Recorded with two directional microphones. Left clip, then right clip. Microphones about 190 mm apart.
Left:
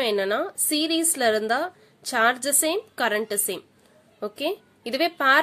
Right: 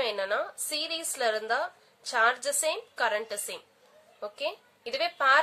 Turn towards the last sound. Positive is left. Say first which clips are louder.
# left 4 dB
turn(degrees=40)  # may be behind; listen again after turning